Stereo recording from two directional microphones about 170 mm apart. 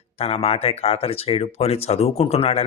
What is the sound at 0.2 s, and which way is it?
Speech, 35° left (ahead or behind).